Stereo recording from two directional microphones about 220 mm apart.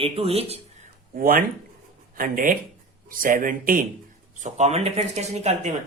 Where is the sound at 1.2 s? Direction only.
40° right (ahead or behind).